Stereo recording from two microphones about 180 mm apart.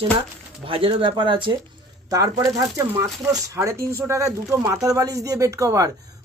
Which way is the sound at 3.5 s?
15° right (ahead or behind).